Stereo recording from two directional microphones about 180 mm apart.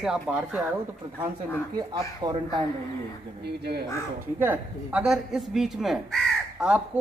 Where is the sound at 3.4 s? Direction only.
65° right (ahead or behind).